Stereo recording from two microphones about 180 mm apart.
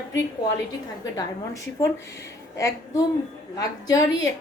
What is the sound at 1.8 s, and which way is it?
A woman's voice, 15° left (ahead or behind).